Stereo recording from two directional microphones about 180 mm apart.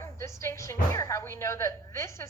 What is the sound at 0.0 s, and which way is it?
Speech, 15° left (ahead or behind).